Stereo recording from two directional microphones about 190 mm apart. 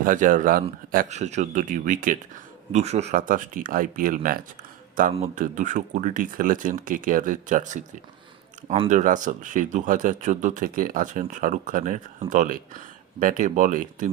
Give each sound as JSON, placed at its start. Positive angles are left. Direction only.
{"t": 0.0, "sound": "speech", "side_deg": -45}
{"t": 2.7, "sound": "speech", "side_deg": -35}